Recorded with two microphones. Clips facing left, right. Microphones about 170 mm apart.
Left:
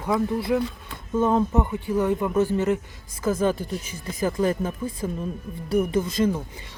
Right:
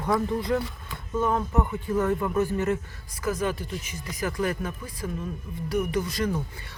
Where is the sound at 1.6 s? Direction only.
15° left (ahead or behind).